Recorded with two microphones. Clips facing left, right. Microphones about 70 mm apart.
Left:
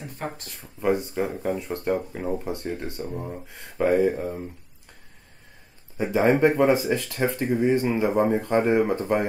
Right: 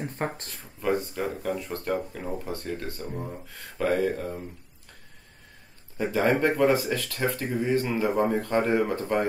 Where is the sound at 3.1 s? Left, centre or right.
Centre.